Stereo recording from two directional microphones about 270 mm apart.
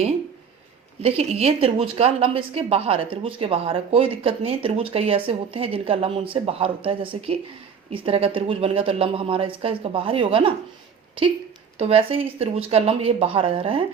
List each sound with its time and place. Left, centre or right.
1.0 s a woman's voice: right
11.8 s a woman's voice: right